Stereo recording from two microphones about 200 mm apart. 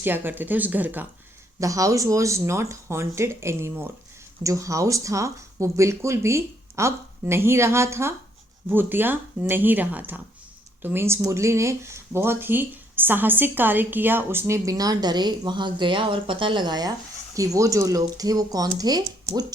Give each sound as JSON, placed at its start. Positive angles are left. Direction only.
{"t": 0.0, "sound": "speech", "side_deg": -10}